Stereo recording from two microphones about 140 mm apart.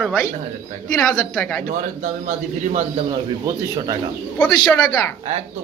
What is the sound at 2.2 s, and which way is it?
Speech, 55° right (ahead or behind).